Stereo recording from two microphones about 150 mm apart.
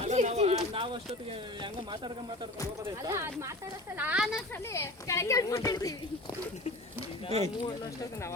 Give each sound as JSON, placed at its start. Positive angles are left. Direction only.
{"t": 0.0, "sound": "a sound", "side_deg": -50}
{"t": 3.0, "sound": "speech", "side_deg": -20}
{"t": 4.7, "sound": "speech", "side_deg": 20}
{"t": 7.3, "sound": "speech", "side_deg": -45}